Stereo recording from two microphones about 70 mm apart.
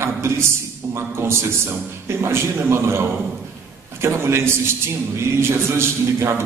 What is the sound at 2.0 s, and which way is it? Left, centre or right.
A man's voice, right.